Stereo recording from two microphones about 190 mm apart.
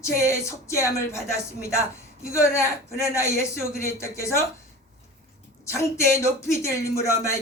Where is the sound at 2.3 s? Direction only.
15° left (ahead or behind).